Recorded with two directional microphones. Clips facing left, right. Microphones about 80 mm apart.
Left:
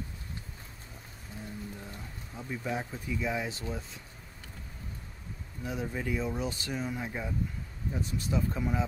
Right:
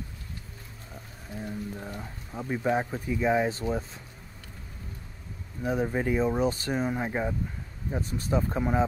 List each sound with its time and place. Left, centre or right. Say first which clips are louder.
1.4 s speech: right 6 dB; right
5.6 s speech: right 8 dB; right